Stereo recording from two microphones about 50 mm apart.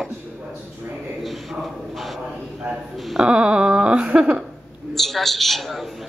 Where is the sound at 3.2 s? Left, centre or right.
Centre.